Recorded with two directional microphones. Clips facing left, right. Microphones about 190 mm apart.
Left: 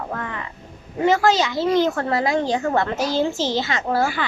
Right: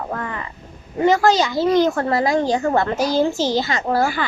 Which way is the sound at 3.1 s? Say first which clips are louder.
Right 3 dB; 40° right (ahead or behind).